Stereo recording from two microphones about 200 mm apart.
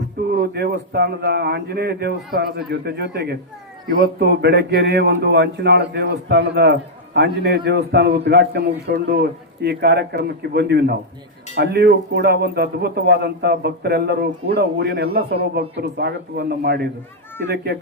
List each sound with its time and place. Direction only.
0.3 s a man's voice: 50° right (ahead or behind)